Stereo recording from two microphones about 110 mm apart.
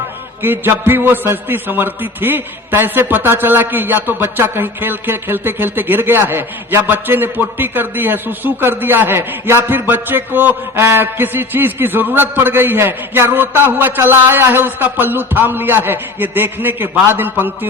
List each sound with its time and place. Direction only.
0.4 s a man's voice: 20° right (ahead or behind)